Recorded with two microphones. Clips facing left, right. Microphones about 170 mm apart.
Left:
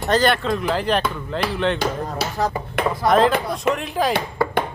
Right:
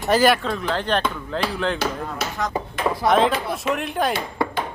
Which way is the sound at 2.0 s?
35° left (ahead or behind).